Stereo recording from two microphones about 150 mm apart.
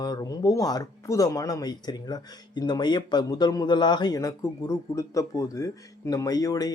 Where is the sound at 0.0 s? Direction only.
25° left (ahead or behind).